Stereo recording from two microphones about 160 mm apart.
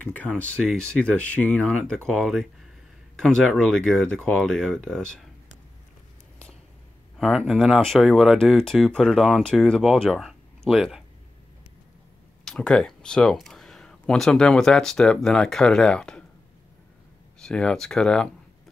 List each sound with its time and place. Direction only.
0.0 s speech: 10° left (ahead or behind)
7.2 s speech: centre (ahead or behind)
12.4 s speech: 5° left (ahead or behind)
17.4 s speech: 5° left (ahead or behind)